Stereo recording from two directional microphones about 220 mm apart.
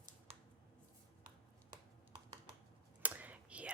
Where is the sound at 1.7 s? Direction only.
20° right (ahead or behind).